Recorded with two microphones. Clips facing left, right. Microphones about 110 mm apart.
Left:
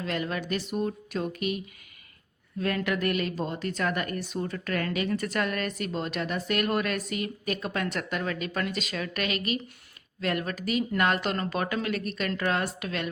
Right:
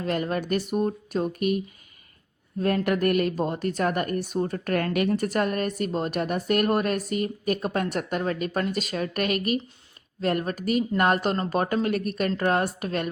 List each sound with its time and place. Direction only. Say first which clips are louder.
0.0 s a woman's voice: right 4 dB; 45° right (ahead or behind)